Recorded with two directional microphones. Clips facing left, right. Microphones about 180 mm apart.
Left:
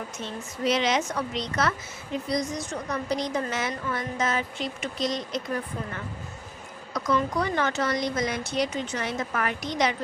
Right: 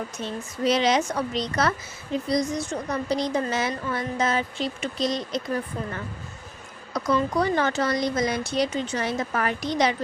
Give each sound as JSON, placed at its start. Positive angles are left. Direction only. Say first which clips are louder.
{"t": 0.2, "sound": "a woman's voice", "louder": "right 2 dB", "side_deg": -35}
{"t": 6.9, "sound": "a woman's voice", "louder": "right 2 dB", "side_deg": -30}